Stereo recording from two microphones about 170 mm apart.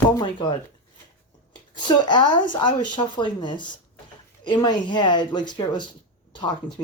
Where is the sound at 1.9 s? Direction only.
25° left (ahead or behind).